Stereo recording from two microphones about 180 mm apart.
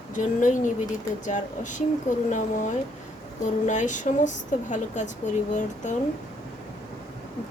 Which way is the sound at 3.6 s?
45° left (ahead or behind).